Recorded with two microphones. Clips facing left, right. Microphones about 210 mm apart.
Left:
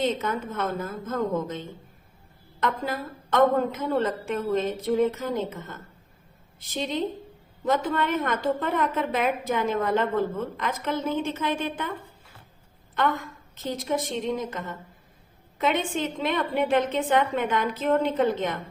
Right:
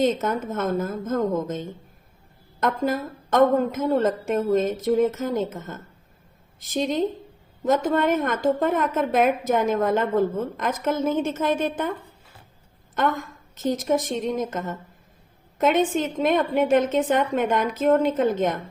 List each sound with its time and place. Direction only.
0.0 s a woman's voice: 45° right (ahead or behind)
13.0 s a woman's voice: 45° right (ahead or behind)